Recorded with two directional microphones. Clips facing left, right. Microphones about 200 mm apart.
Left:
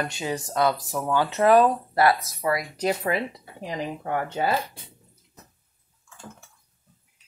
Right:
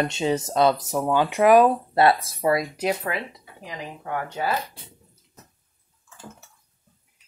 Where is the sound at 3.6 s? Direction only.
35° left (ahead or behind).